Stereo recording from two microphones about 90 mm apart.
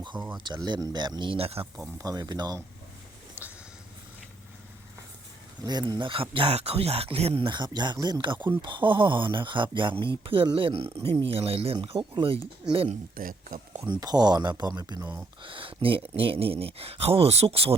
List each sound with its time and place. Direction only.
0.4 s speech: 55° right (ahead or behind); by 1.6 s 90° right
2.0 s speech: 45° right (ahead or behind)
3.4 s a sound: 20° right (ahead or behind)
5.6 s speech: 50° right (ahead or behind); by 7.5 s 85° right
7.5 s speech: 55° right (ahead or behind); by 12.4 s 75° right (ahead or behind)
14.0 s speech: 50° right (ahead or behind)
15.4 s speech: 70° right (ahead or behind); by 17.7 s 90° right